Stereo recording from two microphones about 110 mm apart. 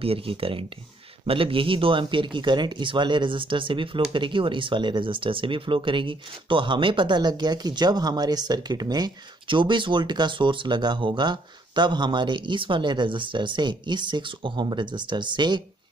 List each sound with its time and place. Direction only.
0.0 s speech: 60° right (ahead or behind)